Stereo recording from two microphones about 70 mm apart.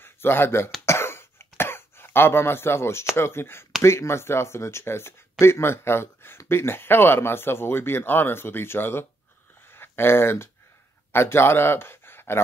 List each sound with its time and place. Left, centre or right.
0.0 s speech: left
0.8 s cough: left
3.2 s speech: left
9.7 s a sound: left
11.1 s speech: left